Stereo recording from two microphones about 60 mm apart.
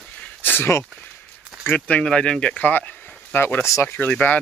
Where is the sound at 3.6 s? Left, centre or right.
Left.